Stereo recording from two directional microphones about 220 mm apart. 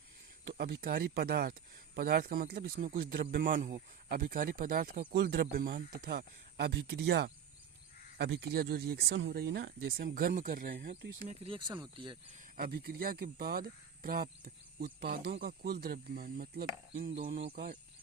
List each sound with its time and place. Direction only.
0.5 s speech: 45° right (ahead or behind)
11.2 s speech: 25° right (ahead or behind)
12.5 s speech: 45° right (ahead or behind)